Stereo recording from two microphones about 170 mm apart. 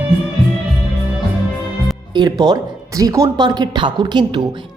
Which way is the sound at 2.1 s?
25° right (ahead or behind).